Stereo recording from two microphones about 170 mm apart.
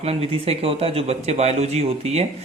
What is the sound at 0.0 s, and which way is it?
Speech, 35° right (ahead or behind).